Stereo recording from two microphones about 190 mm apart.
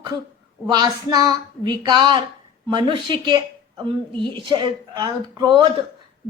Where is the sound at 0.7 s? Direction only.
20° right (ahead or behind).